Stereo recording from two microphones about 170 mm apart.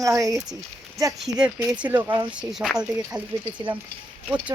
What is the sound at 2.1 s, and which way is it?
Speech, 30° right (ahead or behind).